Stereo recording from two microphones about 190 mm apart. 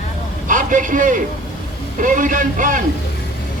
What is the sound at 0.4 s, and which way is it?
A man's voice, 45° right (ahead or behind).